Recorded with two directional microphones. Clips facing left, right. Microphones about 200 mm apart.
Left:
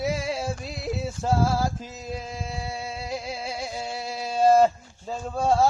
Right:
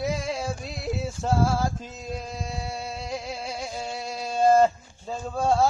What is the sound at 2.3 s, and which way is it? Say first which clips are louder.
Music: even; centre (ahead or behind).